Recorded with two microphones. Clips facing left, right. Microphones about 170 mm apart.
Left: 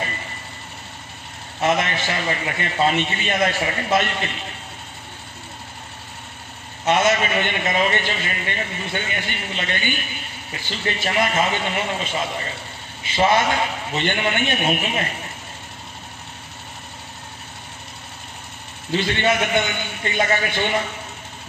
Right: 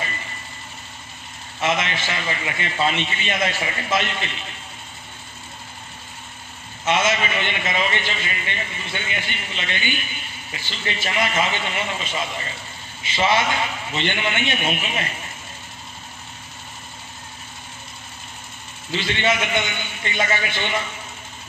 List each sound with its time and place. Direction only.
1.6 s a man's voice: 45° left (ahead or behind)
6.9 s a man's voice: 45° left (ahead or behind)
18.9 s a man's voice: 50° left (ahead or behind)